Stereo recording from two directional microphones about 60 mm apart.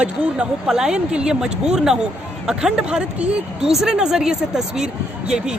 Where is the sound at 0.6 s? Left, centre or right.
Centre.